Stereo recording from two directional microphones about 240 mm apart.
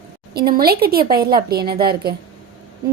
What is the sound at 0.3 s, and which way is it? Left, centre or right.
A woman's voice, right.